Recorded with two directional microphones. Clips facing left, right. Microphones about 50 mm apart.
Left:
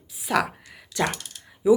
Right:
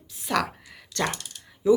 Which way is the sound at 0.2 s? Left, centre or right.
Centre.